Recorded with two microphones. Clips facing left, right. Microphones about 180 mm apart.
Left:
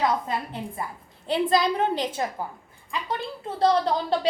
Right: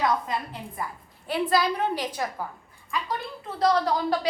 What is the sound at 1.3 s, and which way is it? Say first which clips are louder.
A woman's voice: left 2 dB; 20° left (ahead or behind).